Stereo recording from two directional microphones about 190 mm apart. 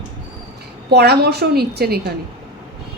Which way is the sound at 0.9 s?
60° right (ahead or behind).